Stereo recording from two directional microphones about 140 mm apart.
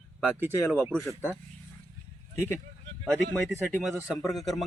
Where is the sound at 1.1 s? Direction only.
15° right (ahead or behind).